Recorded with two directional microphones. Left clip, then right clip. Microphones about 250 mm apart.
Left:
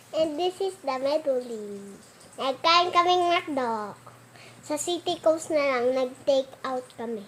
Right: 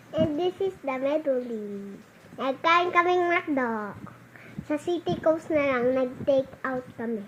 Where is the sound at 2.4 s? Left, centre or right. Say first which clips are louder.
Left 1 dB; centre.